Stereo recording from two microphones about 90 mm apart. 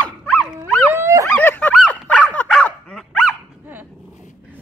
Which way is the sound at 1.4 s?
20° left (ahead or behind).